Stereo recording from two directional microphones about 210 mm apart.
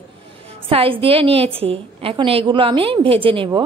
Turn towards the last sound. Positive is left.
turn(degrees=-25)  # may be behind; listen again after turning